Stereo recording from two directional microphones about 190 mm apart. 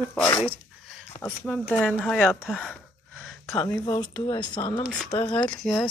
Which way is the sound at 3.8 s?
20° left (ahead or behind).